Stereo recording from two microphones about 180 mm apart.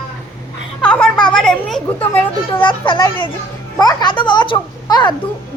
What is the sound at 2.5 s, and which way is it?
Speech, 25° left (ahead or behind).